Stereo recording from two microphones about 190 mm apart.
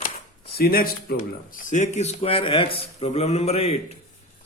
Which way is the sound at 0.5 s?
50° left (ahead or behind).